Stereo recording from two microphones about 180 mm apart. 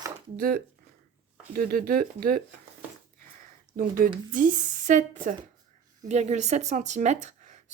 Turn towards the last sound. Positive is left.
turn(degrees=-40)  # may be behind; listen again after turning